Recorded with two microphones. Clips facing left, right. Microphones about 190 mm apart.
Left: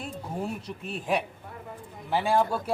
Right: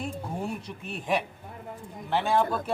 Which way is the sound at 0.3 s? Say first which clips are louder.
Left 1 dB; centre (ahead or behind).